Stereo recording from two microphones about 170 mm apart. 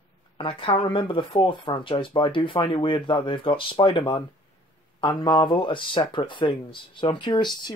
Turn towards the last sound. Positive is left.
turn(degrees=25)  # may be behind; listen again after turning